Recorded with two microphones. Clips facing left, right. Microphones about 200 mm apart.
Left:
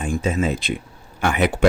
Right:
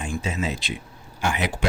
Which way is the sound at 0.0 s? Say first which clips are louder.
Left 6 dB; 55° left (ahead or behind).